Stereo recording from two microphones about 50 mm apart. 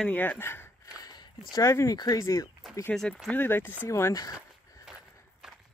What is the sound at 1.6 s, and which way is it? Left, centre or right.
Speech, left.